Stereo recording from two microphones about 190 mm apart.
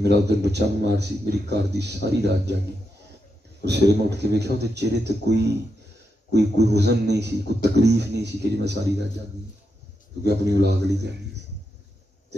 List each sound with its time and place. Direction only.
0.0 s a man's voice: 60° right (ahead or behind)
3.6 s a man's voice: 60° right (ahead or behind)
10.2 s a man's voice: 60° right (ahead or behind)